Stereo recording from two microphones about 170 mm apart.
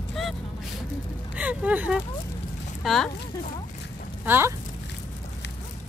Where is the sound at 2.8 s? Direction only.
Centre (ahead or behind).